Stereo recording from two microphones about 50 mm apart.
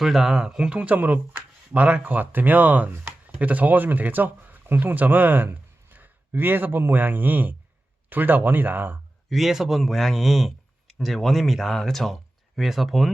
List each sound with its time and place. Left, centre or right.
0.0 s speech: centre; by 9.0 s right
9.3 s speech: centre